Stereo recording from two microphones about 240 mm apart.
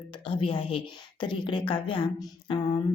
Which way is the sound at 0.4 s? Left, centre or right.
Left.